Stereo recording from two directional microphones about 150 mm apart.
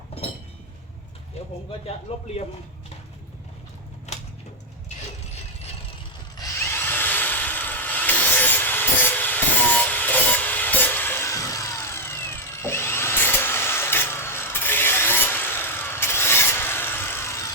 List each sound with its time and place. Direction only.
2.1 s a man's voice: 40° left (ahead or behind)
4.1 s a sound: 50° left (ahead or behind)
6.3 s wood: 20° left (ahead or behind)